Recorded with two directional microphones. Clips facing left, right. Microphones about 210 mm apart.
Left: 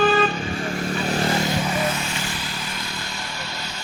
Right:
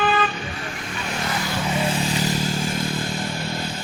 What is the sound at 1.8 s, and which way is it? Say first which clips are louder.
Vehicle: right 3 dB; 30° right (ahead or behind).